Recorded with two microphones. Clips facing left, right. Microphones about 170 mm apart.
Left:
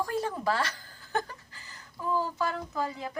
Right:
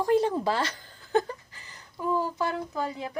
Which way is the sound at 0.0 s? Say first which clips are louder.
Right 7 dB; 25° right (ahead or behind).